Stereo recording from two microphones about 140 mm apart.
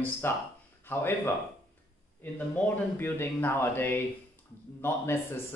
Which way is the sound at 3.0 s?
15° left (ahead or behind).